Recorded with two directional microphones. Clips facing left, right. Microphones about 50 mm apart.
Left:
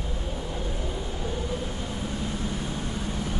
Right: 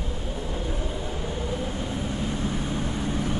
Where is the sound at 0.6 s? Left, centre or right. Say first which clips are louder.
Right 2 dB; centre.